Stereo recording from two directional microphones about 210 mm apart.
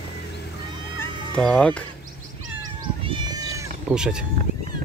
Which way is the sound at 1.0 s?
5° left (ahead or behind).